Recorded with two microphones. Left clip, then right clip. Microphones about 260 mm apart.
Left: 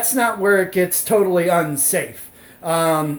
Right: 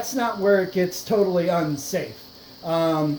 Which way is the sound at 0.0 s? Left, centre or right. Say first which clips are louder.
Left 4 dB; left.